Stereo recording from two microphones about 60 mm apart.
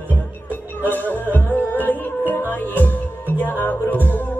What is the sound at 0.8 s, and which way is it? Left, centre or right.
Music, left.